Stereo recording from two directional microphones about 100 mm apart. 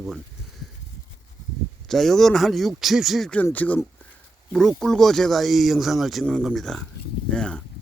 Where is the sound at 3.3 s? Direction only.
15° left (ahead or behind).